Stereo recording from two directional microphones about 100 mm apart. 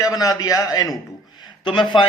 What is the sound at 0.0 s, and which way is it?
Speech, 35° left (ahead or behind).